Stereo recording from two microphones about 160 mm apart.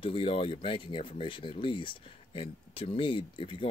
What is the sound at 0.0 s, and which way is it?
Speech, 35° left (ahead or behind).